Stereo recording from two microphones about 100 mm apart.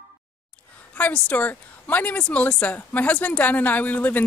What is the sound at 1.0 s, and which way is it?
Speech, 15° left (ahead or behind).